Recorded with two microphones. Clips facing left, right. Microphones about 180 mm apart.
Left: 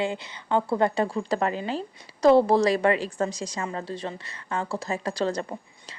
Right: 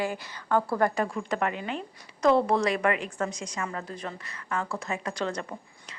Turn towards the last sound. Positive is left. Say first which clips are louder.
# left 4 dB
turn(degrees=35)  # may be behind; listen again after turning